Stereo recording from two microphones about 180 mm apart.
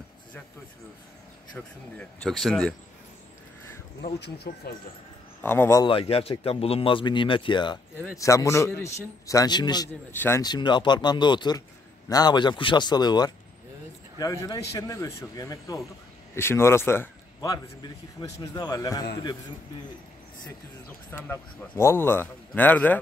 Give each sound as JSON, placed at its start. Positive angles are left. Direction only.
{"t": 2.0, "sound": "speech", "side_deg": 0}
{"t": 4.2, "sound": "speech", "side_deg": 65}
{"t": 5.4, "sound": "a man's voice", "side_deg": 10}
{"t": 5.9, "sound": "a man's voice", "side_deg": 30}
{"t": 10.1, "sound": "a man's voice", "side_deg": 10}
{"t": 10.4, "sound": "a man's voice", "side_deg": 25}
{"t": 21.1, "sound": "a man's voice", "side_deg": 15}